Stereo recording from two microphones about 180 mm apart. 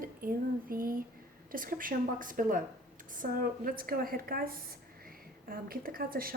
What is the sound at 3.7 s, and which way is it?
A woman's voice, 55° right (ahead or behind).